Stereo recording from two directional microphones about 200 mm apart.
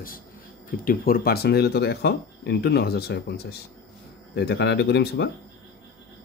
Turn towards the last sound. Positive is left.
turn(degrees=55)  # may be behind; listen again after turning